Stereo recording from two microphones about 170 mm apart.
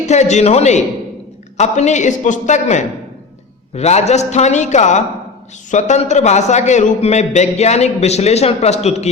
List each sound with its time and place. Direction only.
0.0 s a man's voice: 40° left (ahead or behind)